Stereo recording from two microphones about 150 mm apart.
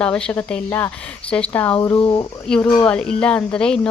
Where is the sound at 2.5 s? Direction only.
10° left (ahead or behind).